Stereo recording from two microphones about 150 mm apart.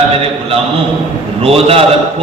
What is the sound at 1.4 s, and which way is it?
Speech, 40° right (ahead or behind).